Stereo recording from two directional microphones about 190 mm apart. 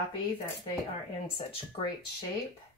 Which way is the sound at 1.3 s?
30° left (ahead or behind).